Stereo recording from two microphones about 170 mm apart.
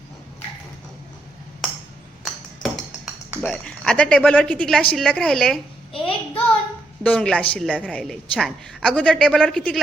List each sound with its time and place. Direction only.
3.2 s a sound: 10° right (ahead or behind)
3.5 s a woman's voice: 5° left (ahead or behind)
5.9 s child singing: 30° left (ahead or behind)
7.0 s a woman's voice: 5° left (ahead or behind)